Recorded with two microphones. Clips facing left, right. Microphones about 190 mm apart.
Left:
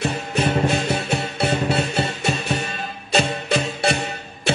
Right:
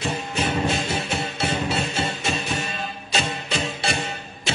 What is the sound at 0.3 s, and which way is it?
Music, 65° left (ahead or behind).